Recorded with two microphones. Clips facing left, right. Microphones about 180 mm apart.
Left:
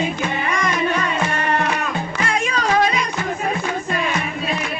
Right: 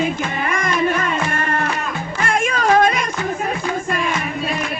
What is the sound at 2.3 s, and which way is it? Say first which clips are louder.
Music: right 4 dB; 50° right (ahead or behind).